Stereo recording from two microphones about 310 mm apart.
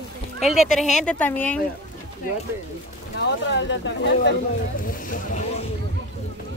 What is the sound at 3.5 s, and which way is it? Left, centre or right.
Speech, left.